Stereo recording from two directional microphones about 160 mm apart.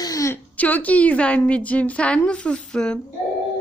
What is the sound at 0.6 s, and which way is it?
A woman's voice, 10° left (ahead or behind).